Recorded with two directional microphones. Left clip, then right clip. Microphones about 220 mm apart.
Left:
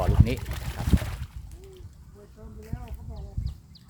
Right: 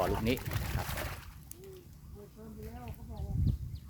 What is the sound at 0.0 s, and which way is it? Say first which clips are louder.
Pour: left 3 dB; centre (ahead or behind).